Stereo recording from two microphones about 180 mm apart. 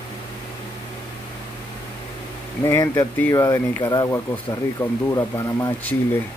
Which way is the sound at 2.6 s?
15° left (ahead or behind).